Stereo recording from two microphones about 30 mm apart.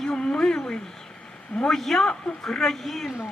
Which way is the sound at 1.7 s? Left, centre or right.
Centre.